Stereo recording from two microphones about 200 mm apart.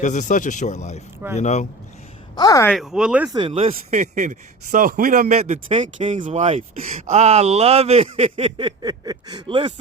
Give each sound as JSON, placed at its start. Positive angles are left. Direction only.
{"t": 0.0, "sound": "speech", "side_deg": 40}
{"t": 2.3, "sound": "speech", "side_deg": 20}
{"t": 2.7, "sound": "speech", "side_deg": -5}
{"t": 3.3, "sound": "speech", "side_deg": -25}